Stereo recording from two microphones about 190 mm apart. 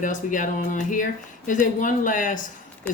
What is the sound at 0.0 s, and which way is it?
Speech, 45° left (ahead or behind).